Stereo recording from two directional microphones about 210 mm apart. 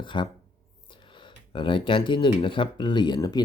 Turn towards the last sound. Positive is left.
turn(degrees=20)  # may be behind; listen again after turning